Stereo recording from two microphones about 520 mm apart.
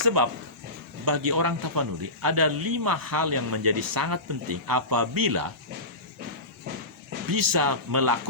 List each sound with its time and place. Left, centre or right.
0.0 s speech: right
7.3 s speech: right